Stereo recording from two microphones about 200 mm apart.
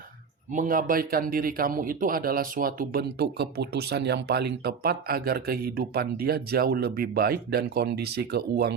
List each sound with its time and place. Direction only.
0.5 s speech: 45° right (ahead or behind)